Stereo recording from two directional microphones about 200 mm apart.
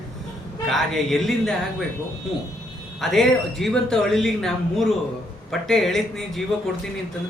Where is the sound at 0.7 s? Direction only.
Centre (ahead or behind).